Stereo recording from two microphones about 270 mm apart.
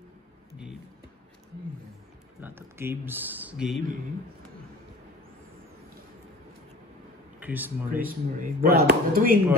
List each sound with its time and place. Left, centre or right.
0.5 s music: centre
2.4 s speech: centre
7.3 s speech: centre
8.0 s speech: right